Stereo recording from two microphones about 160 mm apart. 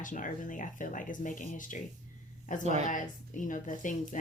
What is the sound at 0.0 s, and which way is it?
Speech, 55° left (ahead or behind).